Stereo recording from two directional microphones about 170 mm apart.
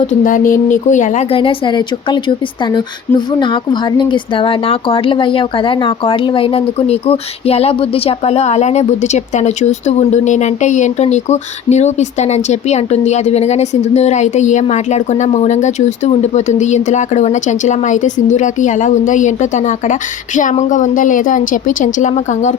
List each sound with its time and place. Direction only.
0.1 s speech: 50° left (ahead or behind)